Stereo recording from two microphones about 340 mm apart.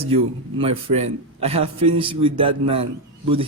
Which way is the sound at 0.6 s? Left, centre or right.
Centre.